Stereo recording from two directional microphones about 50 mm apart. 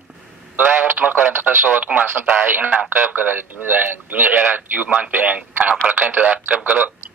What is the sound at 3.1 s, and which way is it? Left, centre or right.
Speech, right.